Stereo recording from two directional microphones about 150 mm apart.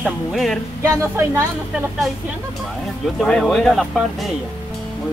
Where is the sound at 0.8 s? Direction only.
20° right (ahead or behind).